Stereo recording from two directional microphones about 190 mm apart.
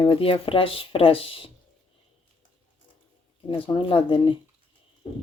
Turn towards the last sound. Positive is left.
turn(degrees=25)  # may be behind; listen again after turning